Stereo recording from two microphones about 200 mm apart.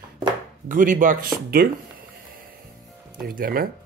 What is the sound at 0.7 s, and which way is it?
Chopping, 40° right (ahead or behind).